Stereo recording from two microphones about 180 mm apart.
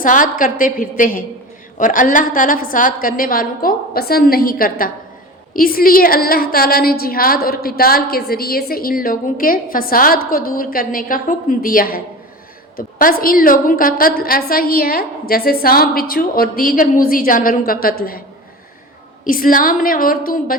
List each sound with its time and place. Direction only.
0.0 s a woman's voice: 50° left (ahead or behind)
19.2 s a woman's voice: 50° left (ahead or behind)